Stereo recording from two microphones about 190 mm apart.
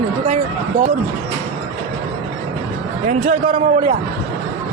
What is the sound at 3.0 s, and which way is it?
Speech, 35° right (ahead or behind).